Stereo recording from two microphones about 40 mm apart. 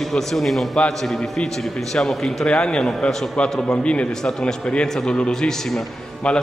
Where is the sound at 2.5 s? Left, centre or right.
Left.